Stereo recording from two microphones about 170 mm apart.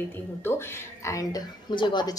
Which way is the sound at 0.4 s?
15° left (ahead or behind).